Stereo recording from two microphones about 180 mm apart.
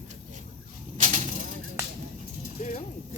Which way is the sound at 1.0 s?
45° right (ahead or behind).